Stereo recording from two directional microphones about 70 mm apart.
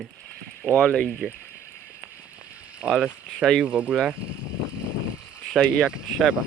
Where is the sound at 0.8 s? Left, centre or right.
Centre.